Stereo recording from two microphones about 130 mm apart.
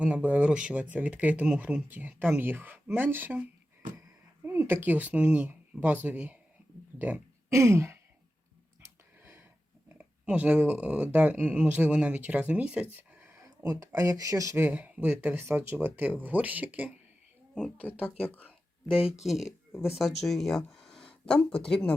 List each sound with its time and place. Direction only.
0.0 s speech: 10° right (ahead or behind)
4.4 s speech: 20° right (ahead or behind)
8.8 s a sound: 15° right (ahead or behind)
10.0 s speech: 10° right (ahead or behind)
13.3 s speech: 25° right (ahead or behind)
14.6 s speech: 15° right (ahead or behind)
17.8 s speech: 10° left (ahead or behind)
19.2 s speech: centre (ahead or behind)